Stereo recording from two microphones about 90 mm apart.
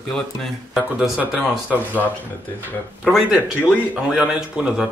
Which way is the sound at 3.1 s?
10° right (ahead or behind).